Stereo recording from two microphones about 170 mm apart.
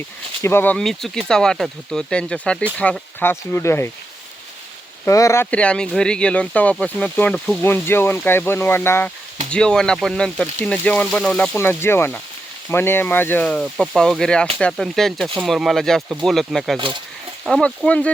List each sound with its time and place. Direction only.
0.4 s speech: 10° left (ahead or behind)
5.0 s speech: 15° left (ahead or behind); by 16.7 s centre (ahead or behind)
16.7 s speech: 30° right (ahead or behind)
17.4 s speech: 5° left (ahead or behind)